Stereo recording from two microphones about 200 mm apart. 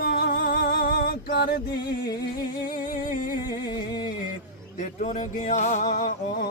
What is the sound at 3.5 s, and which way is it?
Music, 20° left (ahead or behind).